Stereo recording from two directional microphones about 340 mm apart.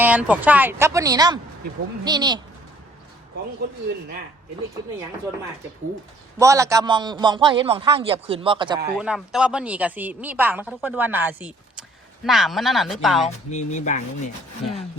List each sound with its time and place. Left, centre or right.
0.0 s a man's voice: centre
6.4 s a man's voice: centre
9.0 s a woman's voice: centre
13.2 s speech: left